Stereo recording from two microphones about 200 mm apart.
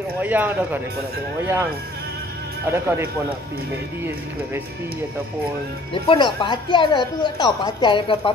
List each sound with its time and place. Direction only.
0.2 s speech: 10° right (ahead or behind)
6.0 s a woman's voice: 25° left (ahead or behind)